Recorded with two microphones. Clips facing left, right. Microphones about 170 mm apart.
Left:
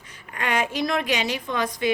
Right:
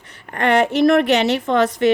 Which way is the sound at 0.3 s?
65° right (ahead or behind).